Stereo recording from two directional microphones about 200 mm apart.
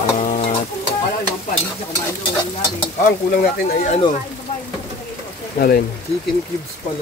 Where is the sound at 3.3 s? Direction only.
45° left (ahead or behind).